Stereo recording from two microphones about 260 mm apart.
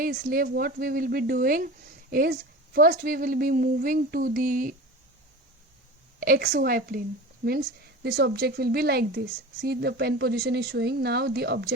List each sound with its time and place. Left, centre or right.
0.0 s speech: right
6.1 s speech: right